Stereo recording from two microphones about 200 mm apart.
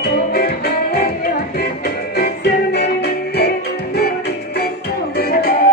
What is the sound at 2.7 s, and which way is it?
Music, 55° left (ahead or behind).